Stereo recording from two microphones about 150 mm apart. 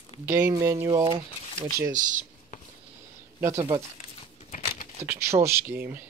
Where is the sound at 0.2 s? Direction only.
15° right (ahead or behind).